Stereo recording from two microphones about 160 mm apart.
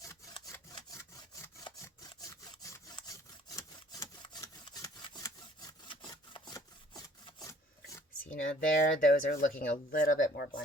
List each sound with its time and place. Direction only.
0.4 s wood: 20° left (ahead or behind)
8.3 s speech: 55° left (ahead or behind)